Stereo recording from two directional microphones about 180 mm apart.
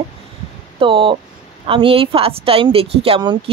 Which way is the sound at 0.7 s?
30° right (ahead or behind).